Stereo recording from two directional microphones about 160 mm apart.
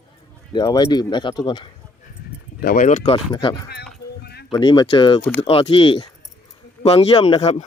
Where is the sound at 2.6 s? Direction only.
65° left (ahead or behind).